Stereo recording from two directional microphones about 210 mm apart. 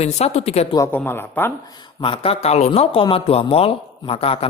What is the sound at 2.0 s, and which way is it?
Speech, 25° left (ahead or behind).